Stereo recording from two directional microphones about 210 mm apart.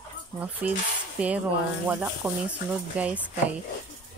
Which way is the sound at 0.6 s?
5° right (ahead or behind).